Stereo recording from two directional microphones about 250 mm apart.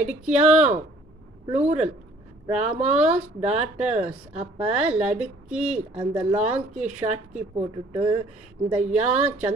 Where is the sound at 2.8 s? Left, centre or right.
Right.